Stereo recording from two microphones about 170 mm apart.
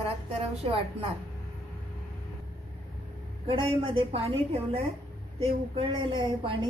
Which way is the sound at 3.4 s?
30° right (ahead or behind).